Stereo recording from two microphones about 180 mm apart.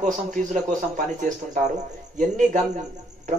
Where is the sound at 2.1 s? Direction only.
45° right (ahead or behind).